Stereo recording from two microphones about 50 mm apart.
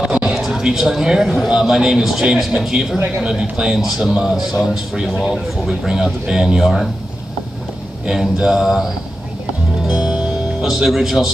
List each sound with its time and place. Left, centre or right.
0.2 s speech: centre
8.1 s speech: centre
9.8 s music: centre